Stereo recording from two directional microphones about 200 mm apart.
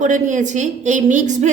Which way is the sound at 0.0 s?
40° right (ahead or behind).